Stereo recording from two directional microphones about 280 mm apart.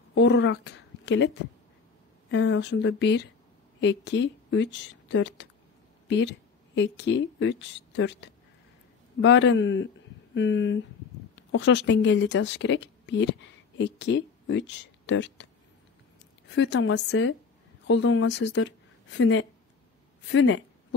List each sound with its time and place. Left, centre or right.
0.1 s a woman's voice: left
16.5 s a woman's voice: left